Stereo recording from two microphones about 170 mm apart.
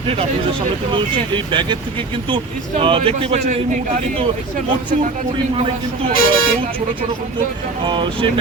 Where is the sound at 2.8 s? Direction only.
30° right (ahead or behind).